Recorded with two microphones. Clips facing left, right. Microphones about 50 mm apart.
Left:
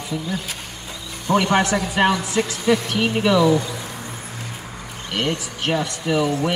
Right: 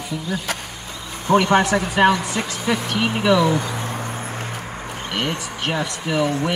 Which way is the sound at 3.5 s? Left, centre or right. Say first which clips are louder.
Left 2 dB; right.